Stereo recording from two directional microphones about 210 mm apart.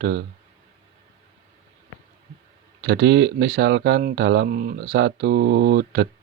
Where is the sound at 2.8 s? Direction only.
55° right (ahead or behind).